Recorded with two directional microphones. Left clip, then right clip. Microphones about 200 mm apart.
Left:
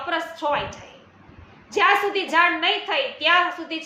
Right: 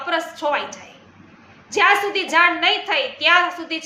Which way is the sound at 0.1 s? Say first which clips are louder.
Right 3 dB; 5° right (ahead or behind).